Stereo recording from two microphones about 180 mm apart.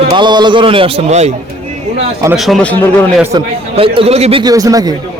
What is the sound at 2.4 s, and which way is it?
Speech, centre (ahead or behind).